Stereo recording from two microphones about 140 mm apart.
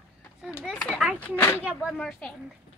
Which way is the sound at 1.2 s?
10° left (ahead or behind).